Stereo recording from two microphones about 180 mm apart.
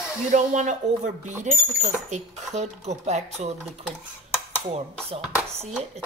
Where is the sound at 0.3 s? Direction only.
45° right (ahead or behind).